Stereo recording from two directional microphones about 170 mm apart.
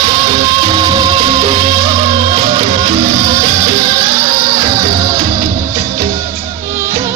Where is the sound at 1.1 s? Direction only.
40° right (ahead or behind).